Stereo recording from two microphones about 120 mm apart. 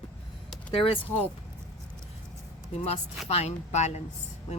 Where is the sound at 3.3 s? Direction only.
65° left (ahead or behind).